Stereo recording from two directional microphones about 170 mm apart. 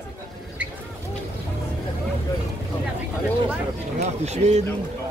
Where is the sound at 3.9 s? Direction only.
40° right (ahead or behind).